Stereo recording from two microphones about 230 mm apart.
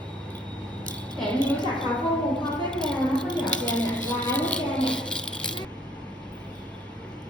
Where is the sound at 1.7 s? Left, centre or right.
Centre.